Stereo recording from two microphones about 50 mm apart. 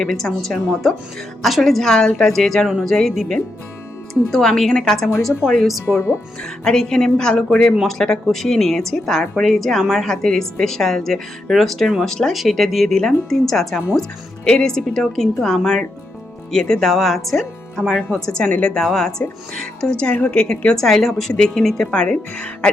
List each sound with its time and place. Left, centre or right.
0.0 s a woman's voice: centre
1.4 s a woman's voice: centre
6.7 s a woman's voice: centre
12.9 s a woman's voice: centre
18.4 s a woman's voice: left
18.9 s a woman's voice: centre
20.7 s a woman's voice: centre
21.8 s a woman's voice: centre